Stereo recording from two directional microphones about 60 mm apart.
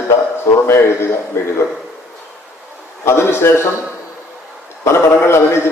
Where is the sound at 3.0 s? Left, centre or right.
Left.